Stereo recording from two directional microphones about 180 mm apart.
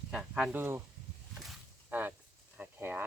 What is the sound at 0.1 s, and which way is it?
Speech, centre (ahead or behind).